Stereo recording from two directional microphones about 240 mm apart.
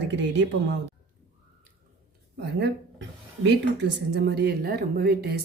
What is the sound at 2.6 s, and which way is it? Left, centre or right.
Speech, right.